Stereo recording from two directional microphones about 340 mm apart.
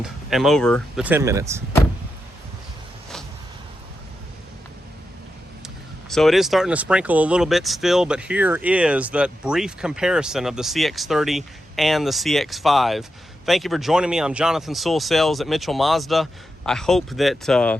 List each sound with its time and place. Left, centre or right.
0.0 s speech: centre
5.6 s speech: centre